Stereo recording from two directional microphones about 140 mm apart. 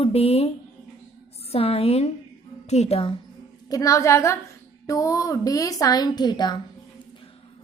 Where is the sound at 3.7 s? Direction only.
25° left (ahead or behind).